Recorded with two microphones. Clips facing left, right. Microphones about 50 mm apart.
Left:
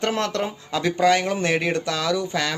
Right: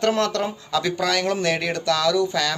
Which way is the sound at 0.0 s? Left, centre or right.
Left.